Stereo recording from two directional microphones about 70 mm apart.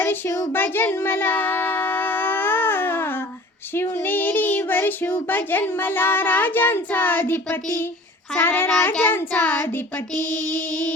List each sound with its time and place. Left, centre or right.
0.0 s child singing: left